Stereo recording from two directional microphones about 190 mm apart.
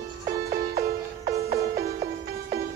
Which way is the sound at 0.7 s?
50° right (ahead or behind).